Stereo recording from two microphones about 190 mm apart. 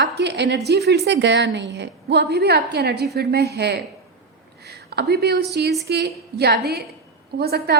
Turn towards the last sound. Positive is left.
turn(degrees=-55)  # may be behind; listen again after turning